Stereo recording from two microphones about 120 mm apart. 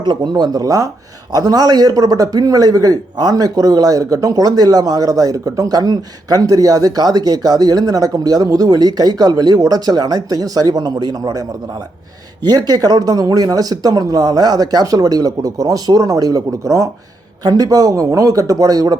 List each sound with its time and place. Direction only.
0.0 s a man's voice: 35° right (ahead or behind)